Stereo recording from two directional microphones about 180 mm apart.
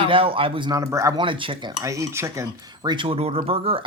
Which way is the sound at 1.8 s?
15° right (ahead or behind).